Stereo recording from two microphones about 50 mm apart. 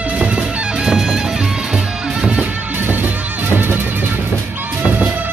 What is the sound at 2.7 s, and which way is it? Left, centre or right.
Music, right.